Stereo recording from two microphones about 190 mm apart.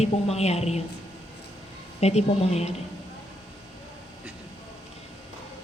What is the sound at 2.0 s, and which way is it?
Speech, 35° left (ahead or behind).